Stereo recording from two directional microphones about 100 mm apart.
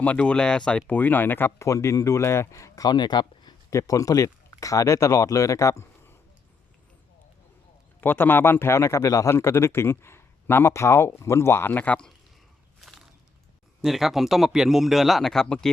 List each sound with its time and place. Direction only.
0.0 s speech: 15° left (ahead or behind)
1.5 s speech: 30° left (ahead or behind); by 3.5 s 45° left (ahead or behind)
3.7 s speech: 35° left (ahead or behind)
8.0 s speech: 20° left (ahead or behind)
13.8 s speech: centre (ahead or behind)